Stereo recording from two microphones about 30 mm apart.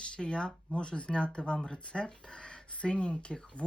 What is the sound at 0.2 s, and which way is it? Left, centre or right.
Speech, left.